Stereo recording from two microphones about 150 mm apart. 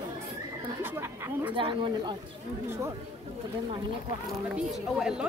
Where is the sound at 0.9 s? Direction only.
15° right (ahead or behind).